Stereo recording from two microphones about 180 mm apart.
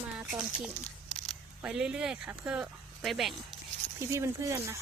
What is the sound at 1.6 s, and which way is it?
Speech, 5° right (ahead or behind).